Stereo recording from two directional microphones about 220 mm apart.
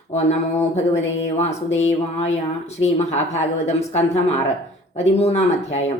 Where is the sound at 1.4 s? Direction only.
30° left (ahead or behind).